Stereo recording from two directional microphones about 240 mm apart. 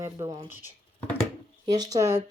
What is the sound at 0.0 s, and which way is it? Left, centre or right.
Speech, centre.